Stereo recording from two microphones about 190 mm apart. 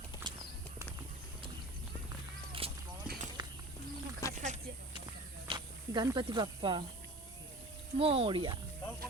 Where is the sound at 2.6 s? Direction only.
30° right (ahead or behind).